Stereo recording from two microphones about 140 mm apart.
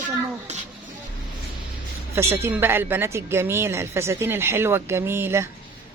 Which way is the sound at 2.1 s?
15° right (ahead or behind).